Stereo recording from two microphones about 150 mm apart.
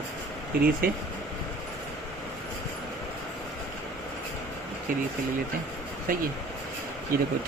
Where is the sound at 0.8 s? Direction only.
70° right (ahead or behind).